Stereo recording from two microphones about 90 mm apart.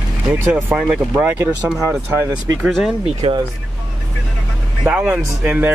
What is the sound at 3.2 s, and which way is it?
Speech, 90° right.